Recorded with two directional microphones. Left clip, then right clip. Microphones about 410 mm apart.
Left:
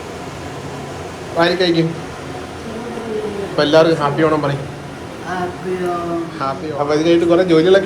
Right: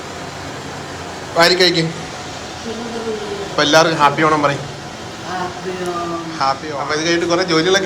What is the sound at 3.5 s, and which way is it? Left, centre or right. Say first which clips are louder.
Speech: even; centre.